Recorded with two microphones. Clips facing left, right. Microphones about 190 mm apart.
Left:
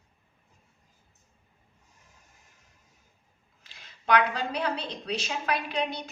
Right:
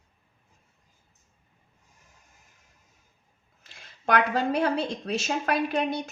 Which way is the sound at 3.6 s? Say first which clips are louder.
Even; 50° right (ahead or behind).